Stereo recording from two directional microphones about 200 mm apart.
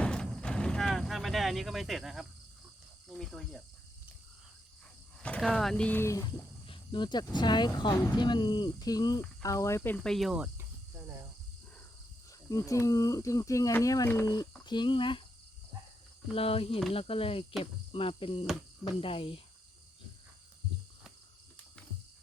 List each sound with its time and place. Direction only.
0.0 s vehicle: 5° left (ahead or behind)
3.1 s cricket: 5° left (ahead or behind)
5.2 s speech: 5° left (ahead or behind)
9.4 s cricket: 15° left (ahead or behind); by 11.1 s 10° right (ahead or behind)
12.5 s speech: 15° left (ahead or behind)
16.3 s speech: 30° left (ahead or behind)